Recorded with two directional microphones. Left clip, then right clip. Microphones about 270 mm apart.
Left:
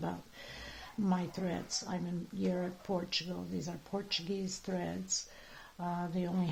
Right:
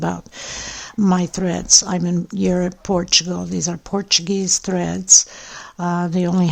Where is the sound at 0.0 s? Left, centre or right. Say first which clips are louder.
Right 17 dB; right.